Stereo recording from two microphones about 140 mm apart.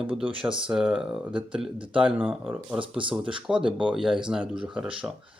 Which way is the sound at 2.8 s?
40° right (ahead or behind).